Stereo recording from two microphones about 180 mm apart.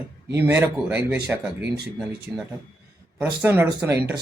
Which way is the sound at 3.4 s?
10° right (ahead or behind).